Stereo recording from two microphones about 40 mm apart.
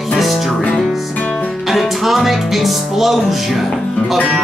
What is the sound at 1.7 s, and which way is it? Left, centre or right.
Music, centre.